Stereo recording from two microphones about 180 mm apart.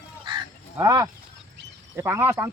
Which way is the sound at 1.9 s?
15° right (ahead or behind).